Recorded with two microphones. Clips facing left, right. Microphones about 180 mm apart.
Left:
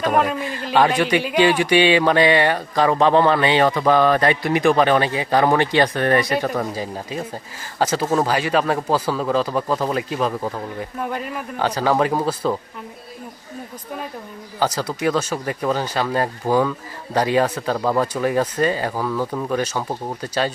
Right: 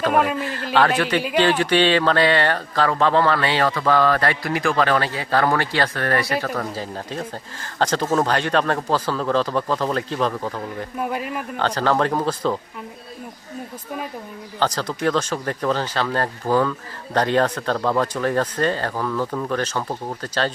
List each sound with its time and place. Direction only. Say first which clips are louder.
0.1 s speech: left 1 dB; centre (ahead or behind)
0.3 s a sound: even; 15° left (ahead or behind)
0.6 s speech: left 2 dB; 5° left (ahead or behind)
11.0 s speech: right 1 dB; 5° right (ahead or behind)
11.5 s speech: left 1 dB; 10° left (ahead or behind)
14.6 s speech: left 1 dB; 10° left (ahead or behind)